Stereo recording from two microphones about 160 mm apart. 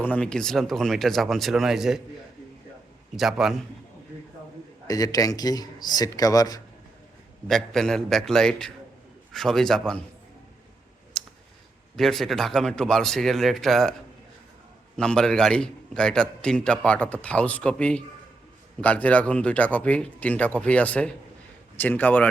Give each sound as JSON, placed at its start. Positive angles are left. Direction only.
{"t": 0.0, "sound": "a man's voice", "side_deg": 10}
{"t": 3.2, "sound": "a man's voice", "side_deg": 0}
{"t": 4.9, "sound": "speech", "side_deg": 20}
{"t": 7.4, "sound": "a man's voice", "side_deg": 5}
{"t": 11.1, "sound": "clicking", "side_deg": 5}
{"t": 11.9, "sound": "a man's voice", "side_deg": 0}
{"t": 14.9, "sound": "a man's voice", "side_deg": 5}